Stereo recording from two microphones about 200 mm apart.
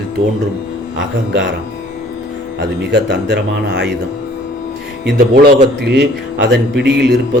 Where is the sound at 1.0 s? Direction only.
65° right (ahead or behind).